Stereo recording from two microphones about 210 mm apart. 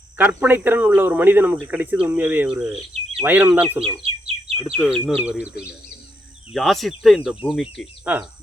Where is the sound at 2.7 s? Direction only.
25° right (ahead or behind).